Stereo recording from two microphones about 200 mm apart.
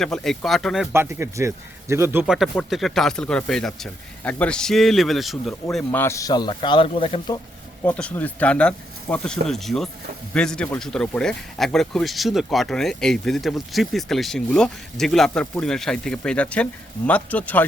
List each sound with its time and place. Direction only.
0.0 s speech: centre (ahead or behind)
0.9 s a man's voice: 10° right (ahead or behind)
2.2 s a man's voice: centre (ahead or behind); by 7.3 s 30° left (ahead or behind)
7.9 s speech: 10° left (ahead or behind)